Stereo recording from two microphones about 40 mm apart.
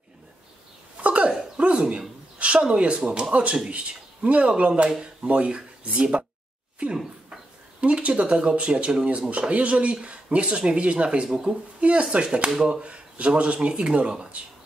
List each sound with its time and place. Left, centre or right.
1.0 s a sound: right
1.6 s speech: right
4.8 s speech: right
6.8 s speech: right